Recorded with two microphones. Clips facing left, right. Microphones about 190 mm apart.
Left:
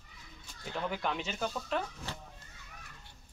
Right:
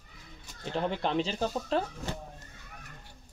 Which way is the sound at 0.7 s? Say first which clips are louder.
Right 6 dB; 30° right (ahead or behind).